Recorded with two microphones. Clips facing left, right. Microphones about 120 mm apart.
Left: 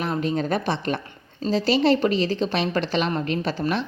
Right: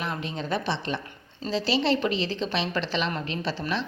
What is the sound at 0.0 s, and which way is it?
A woman's voice, 40° left (ahead or behind).